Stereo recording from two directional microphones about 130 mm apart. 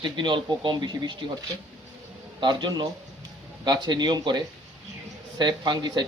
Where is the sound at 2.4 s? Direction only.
35° right (ahead or behind).